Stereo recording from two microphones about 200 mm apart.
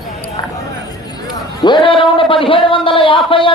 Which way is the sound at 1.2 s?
20° left (ahead or behind).